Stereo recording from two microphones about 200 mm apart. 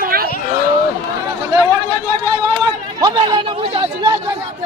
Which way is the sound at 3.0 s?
20° right (ahead or behind).